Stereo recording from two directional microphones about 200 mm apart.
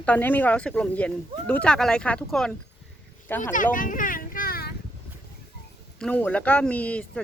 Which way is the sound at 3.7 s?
40° left (ahead or behind).